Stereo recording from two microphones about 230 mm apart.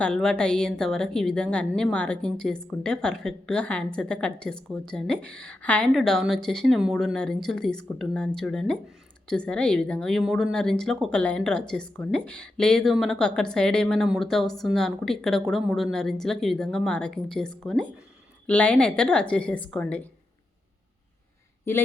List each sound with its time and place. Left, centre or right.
0.0 s a woman's voice: centre